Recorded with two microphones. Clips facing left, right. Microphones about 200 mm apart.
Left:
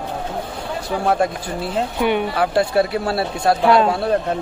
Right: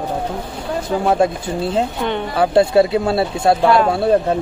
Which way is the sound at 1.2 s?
25° right (ahead or behind).